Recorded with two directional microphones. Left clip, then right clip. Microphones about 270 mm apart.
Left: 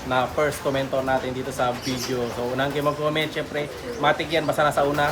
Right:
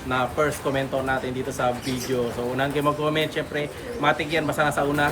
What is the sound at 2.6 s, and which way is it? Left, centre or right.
Speech, centre.